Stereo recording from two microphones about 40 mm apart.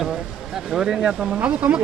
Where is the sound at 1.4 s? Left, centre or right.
Right.